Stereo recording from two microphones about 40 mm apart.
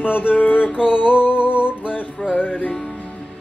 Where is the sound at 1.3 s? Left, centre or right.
Right.